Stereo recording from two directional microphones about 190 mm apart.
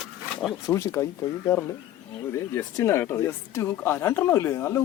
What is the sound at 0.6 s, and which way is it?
Speech, 15° left (ahead or behind).